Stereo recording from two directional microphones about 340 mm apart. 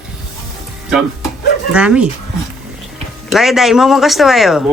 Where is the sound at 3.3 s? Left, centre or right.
Centre.